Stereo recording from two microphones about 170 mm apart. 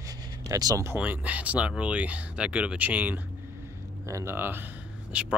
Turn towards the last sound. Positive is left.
turn(degrees=-10)  # may be behind; listen again after turning